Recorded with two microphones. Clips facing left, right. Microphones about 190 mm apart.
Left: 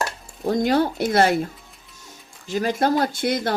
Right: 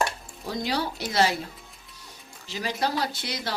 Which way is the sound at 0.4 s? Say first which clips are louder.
Left 9 dB; 50° left (ahead or behind).